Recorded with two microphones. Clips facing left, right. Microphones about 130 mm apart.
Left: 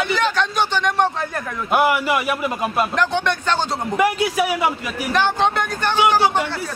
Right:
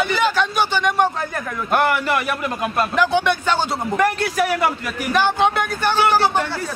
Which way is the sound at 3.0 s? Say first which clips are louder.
Right 2 dB; 5° right (ahead or behind).